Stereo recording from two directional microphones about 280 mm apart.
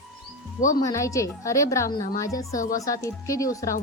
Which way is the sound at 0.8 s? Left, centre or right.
Centre.